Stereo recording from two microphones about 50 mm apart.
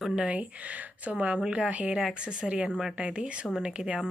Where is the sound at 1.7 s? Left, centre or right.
Right.